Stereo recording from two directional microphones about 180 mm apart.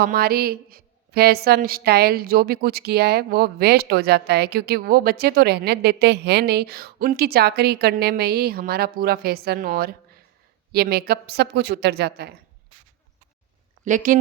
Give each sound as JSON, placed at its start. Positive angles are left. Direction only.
{"t": 0.0, "sound": "a woman's voice", "side_deg": -60}
{"t": 13.8, "sound": "speech", "side_deg": -45}